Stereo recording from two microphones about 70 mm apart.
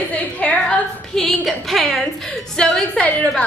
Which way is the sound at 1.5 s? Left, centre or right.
Centre.